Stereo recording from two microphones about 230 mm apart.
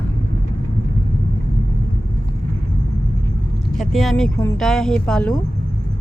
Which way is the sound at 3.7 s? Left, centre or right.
Centre.